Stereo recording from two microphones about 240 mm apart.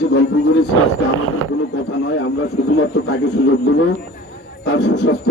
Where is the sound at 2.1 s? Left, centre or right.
Left.